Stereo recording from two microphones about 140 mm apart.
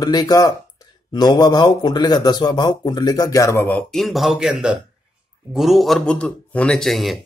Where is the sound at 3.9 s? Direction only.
Centre (ahead or behind).